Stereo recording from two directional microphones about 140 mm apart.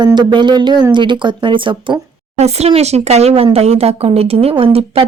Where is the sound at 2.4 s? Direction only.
50° right (ahead or behind).